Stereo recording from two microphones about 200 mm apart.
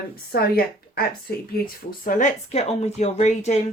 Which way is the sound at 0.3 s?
50° left (ahead or behind).